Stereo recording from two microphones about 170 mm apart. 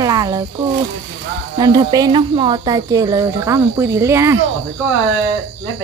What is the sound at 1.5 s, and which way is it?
Speech, 20° right (ahead or behind).